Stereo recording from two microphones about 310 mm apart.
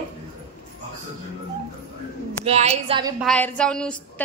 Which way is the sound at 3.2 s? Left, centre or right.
Centre.